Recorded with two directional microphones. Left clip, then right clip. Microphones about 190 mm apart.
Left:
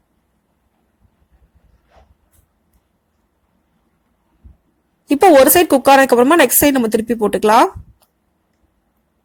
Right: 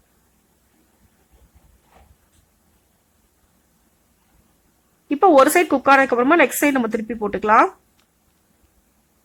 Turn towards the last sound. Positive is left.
turn(degrees=35)  # may be behind; listen again after turning